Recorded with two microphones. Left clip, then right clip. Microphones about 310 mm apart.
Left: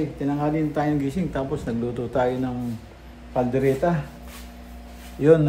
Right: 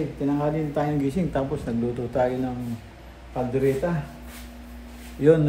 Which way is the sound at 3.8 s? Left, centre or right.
Centre.